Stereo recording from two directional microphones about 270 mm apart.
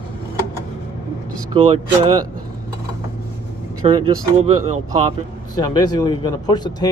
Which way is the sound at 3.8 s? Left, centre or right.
Right.